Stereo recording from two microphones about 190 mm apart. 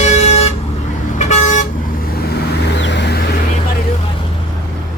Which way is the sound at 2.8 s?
65° left (ahead or behind).